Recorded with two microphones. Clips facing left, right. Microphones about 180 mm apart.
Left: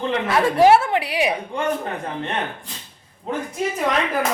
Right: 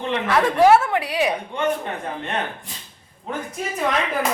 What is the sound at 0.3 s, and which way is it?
Speech, 25° left (ahead or behind).